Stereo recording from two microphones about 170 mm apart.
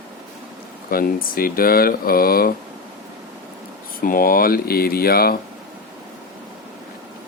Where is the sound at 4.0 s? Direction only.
55° left (ahead or behind).